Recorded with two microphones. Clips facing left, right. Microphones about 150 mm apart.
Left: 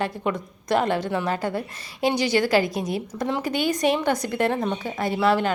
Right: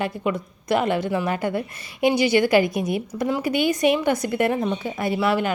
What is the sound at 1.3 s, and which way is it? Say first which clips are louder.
Speech: right 2 dB; 40° left (ahead or behind).